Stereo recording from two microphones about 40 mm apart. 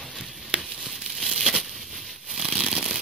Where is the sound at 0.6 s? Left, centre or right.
Centre.